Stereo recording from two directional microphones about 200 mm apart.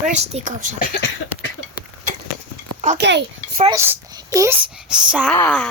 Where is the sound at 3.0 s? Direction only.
60° right (ahead or behind).